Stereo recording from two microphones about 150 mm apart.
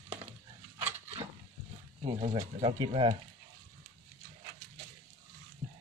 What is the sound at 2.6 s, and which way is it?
Speech, 35° right (ahead or behind).